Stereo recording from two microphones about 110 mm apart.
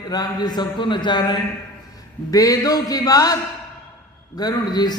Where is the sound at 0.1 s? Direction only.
40° left (ahead or behind).